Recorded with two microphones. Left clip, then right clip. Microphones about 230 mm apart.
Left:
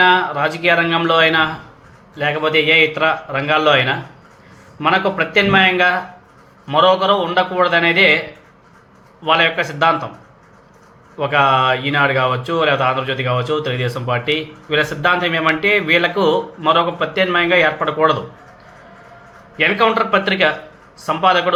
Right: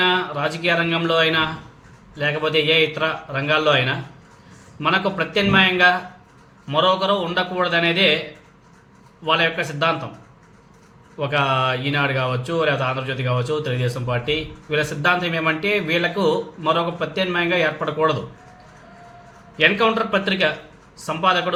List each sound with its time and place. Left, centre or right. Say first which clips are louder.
0.0 s speech: left 6 dB; centre
9.2 s speech: left 5 dB; centre
11.2 s speech: left 6 dB; centre
19.5 s speech: left 3 dB; centre